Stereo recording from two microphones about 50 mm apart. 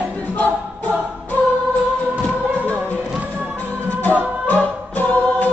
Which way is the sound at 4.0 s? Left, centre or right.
Left.